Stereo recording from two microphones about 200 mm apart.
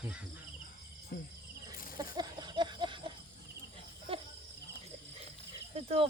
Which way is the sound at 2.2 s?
20° right (ahead or behind).